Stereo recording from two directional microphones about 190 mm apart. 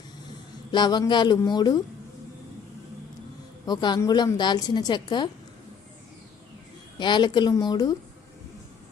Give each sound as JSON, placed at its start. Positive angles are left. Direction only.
{"t": 0.7, "sound": "a woman's voice", "side_deg": 25}
{"t": 3.7, "sound": "a woman's voice", "side_deg": 25}
{"t": 7.0, "sound": "a woman's voice", "side_deg": 25}